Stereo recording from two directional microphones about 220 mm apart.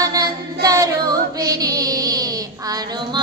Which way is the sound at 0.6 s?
15° right (ahead or behind).